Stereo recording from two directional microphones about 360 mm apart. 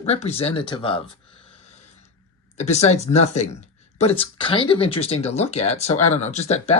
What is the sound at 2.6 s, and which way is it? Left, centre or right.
Speech, centre.